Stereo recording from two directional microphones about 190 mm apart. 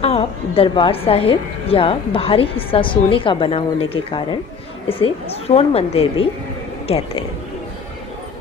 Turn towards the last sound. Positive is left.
turn(degrees=30)  # may be behind; listen again after turning